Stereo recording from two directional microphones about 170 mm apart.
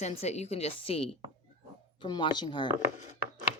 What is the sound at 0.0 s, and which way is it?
A woman's voice, 40° left (ahead or behind).